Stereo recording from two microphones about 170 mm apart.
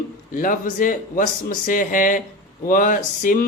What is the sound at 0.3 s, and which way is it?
A man's voice, 55° left (ahead or behind).